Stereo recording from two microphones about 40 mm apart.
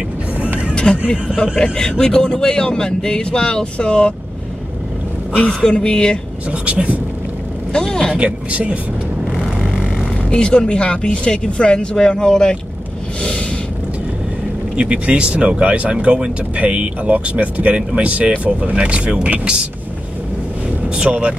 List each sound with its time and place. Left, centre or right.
1.1 s speech: centre
1.6 s speech: centre
5.5 s speech: centre
6.5 s speech: right
7.7 s speech: centre
8.2 s speech: right
10.3 s speech: left
14.8 s speech: right
21.1 s speech: right